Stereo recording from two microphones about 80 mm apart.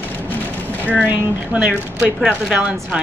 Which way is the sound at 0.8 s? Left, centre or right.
Centre.